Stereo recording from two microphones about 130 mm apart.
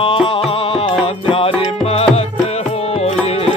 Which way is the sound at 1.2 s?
45° left (ahead or behind).